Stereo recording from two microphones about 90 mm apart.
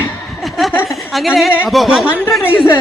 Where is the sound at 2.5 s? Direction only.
25° left (ahead or behind).